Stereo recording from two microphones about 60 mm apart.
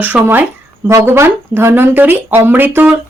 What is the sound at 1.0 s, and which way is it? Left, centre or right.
Speech, right.